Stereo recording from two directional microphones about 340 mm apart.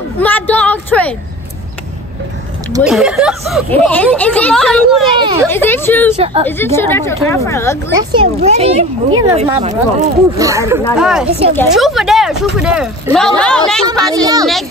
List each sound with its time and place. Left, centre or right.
0.2 s a woman's voice: centre
2.7 s speech: centre
5.1 s a child's voice: centre
5.5 s a woman's voice: centre
6.1 s a child's voice: centre
6.6 s a woman's voice: centre
8.0 s a child's voice: centre
10.3 s a child's voice: centre
10.8 s speech: centre
11.2 s a child's voice: centre
11.5 s speech: centre
13.8 s a child's voice: centre